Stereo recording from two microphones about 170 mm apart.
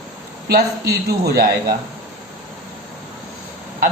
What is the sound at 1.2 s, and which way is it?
Speech, 65° right (ahead or behind).